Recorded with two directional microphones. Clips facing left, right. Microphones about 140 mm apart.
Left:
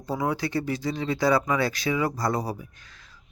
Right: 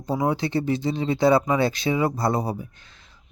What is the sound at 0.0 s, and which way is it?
Speech, 25° right (ahead or behind).